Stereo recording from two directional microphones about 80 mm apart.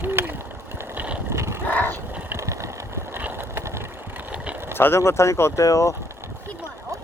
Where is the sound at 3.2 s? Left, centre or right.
Right.